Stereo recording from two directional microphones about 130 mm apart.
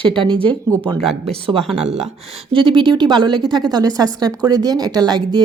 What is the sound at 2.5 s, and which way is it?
Speech, 40° right (ahead or behind).